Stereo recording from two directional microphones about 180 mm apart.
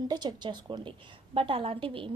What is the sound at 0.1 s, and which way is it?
A woman's voice, 25° right (ahead or behind).